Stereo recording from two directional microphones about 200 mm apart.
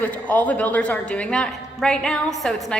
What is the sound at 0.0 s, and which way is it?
A woman's voice, 10° left (ahead or behind).